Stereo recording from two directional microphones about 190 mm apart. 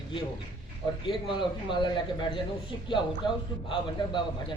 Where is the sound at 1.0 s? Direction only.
25° left (ahead or behind).